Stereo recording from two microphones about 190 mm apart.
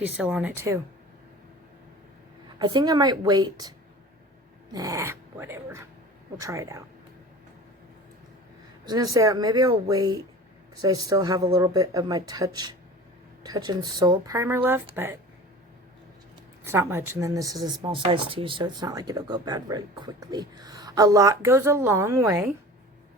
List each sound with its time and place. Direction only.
0.2 s speech: 5° right (ahead or behind)
2.6 s speech: 20° right (ahead or behind)
8.9 s speech: 20° right (ahead or behind)
16.6 s speech: 15° right (ahead or behind)